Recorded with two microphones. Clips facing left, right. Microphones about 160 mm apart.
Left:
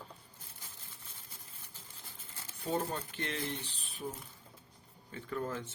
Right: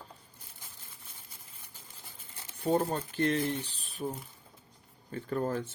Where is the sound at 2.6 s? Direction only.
35° right (ahead or behind).